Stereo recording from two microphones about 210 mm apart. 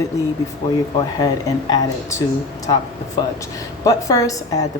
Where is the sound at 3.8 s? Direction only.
15° left (ahead or behind).